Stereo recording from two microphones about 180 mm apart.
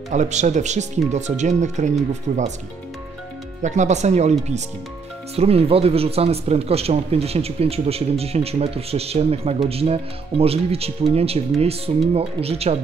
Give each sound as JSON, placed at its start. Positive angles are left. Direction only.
{"t": 0.1, "sound": "speech", "side_deg": -40}
{"t": 3.6, "sound": "speech", "side_deg": -40}